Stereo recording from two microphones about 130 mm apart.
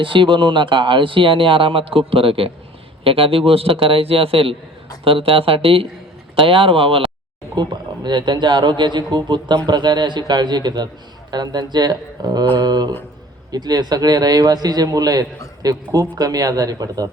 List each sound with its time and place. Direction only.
0.0 s a man's voice: 40° right (ahead or behind)
7.5 s a man's voice: 35° right (ahead or behind)